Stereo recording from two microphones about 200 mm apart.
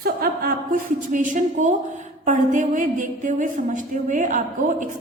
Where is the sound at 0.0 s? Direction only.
50° right (ahead or behind).